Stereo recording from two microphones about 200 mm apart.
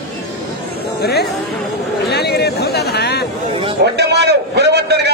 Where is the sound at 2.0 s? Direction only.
55° left (ahead or behind).